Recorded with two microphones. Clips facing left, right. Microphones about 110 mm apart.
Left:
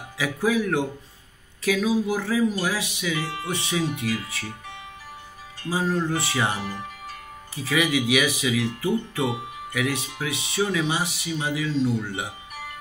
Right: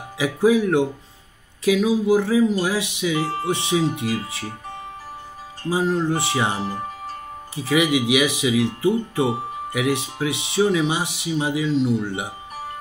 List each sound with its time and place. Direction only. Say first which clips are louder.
0.2 s speech: right 6 dB; 20° right (ahead or behind)
3.3 s speech: right 7 dB; 35° right (ahead or behind)
3.5 s speech: right 3 dB; 25° right (ahead or behind)
5.7 s speech: right 4 dB; 20° right (ahead or behind)